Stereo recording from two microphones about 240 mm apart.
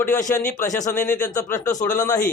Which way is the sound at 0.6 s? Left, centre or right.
Centre.